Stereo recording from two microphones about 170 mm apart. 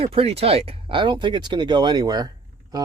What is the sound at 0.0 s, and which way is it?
Speech, 35° right (ahead or behind).